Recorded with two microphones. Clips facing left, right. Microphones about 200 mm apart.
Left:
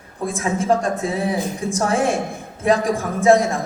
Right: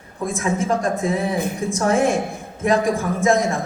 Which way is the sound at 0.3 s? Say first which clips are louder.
Left 2 dB; 35° left (ahead or behind).